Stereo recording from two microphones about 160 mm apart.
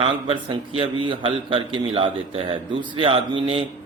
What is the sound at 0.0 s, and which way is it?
A man's voice, 35° right (ahead or behind).